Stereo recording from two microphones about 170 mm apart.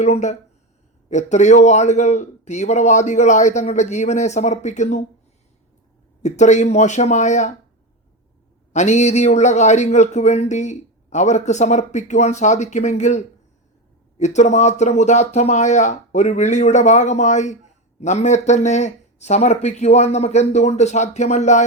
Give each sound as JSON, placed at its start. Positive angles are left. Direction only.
{"t": 0.0, "sound": "speech", "side_deg": 45}
{"t": 6.2, "sound": "speech", "side_deg": 45}
{"t": 8.7, "sound": "speech", "side_deg": 45}